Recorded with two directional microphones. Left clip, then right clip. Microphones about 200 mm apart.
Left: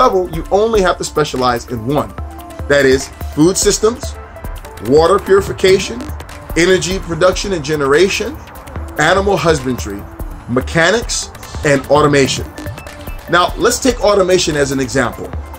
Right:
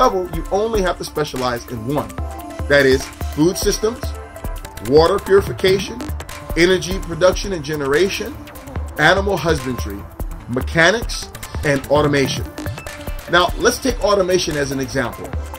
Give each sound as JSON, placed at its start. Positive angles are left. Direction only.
{"t": 0.0, "sound": "speech", "side_deg": -5}